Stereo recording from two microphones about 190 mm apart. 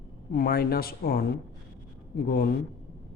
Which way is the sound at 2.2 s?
55° left (ahead or behind).